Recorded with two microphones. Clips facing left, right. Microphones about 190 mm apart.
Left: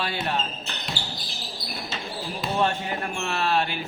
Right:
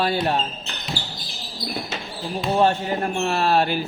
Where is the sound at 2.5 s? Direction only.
35° right (ahead or behind).